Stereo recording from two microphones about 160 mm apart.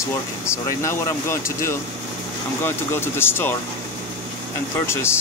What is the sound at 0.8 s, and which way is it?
Speech, 20° left (ahead or behind).